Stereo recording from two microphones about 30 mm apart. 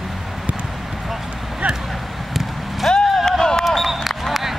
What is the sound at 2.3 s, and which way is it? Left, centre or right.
Vehicle, centre.